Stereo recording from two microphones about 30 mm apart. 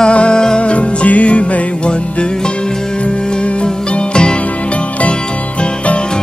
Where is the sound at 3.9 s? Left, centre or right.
Left.